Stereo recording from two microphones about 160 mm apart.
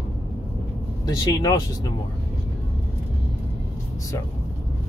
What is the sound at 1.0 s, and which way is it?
Speech, 25° left (ahead or behind).